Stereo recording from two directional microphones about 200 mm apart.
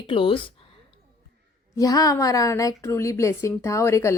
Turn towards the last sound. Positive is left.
turn(degrees=15)  # may be behind; listen again after turning